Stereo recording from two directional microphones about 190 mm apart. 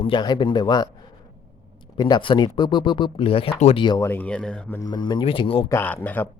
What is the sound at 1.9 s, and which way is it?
Speech, 20° left (ahead or behind).